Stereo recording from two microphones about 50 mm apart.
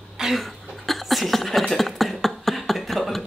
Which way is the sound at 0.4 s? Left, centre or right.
Centre.